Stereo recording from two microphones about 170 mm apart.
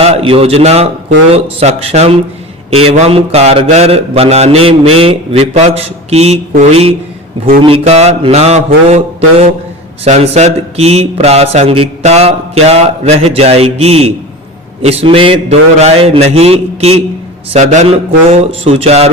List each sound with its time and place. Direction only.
0.0 s speech: 35° right (ahead or behind)
7.6 s speech: 35° right (ahead or behind)